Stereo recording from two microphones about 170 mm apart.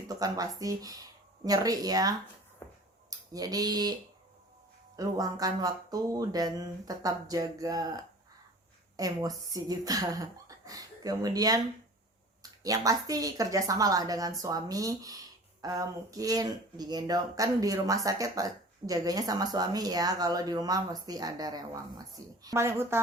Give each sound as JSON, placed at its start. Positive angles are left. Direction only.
{"t": 0.1, "sound": "a woman's voice", "side_deg": -20}
{"t": 2.6, "sound": "tick-tock", "side_deg": 15}
{"t": 3.1, "sound": "speech", "side_deg": -20}
{"t": 4.9, "sound": "a woman's voice", "side_deg": -20}